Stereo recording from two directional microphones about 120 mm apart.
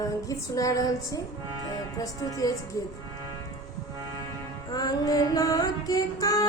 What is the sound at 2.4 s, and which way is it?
Speech, 30° left (ahead or behind).